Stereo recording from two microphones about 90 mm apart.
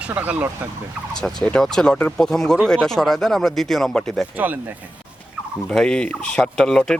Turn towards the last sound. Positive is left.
turn(degrees=5)  # may be behind; listen again after turning